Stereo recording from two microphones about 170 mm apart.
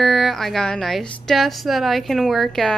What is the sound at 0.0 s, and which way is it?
A woman's voice, centre (ahead or behind).